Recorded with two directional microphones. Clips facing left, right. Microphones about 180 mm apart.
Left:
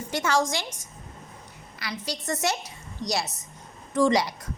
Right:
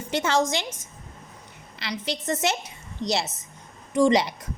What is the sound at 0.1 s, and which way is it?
Speech, 25° right (ahead or behind).